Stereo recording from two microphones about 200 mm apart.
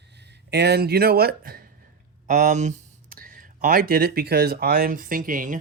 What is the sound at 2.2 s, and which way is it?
Speech, 40° right (ahead or behind).